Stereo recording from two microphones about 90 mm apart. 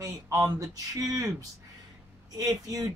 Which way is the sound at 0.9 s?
45° right (ahead or behind).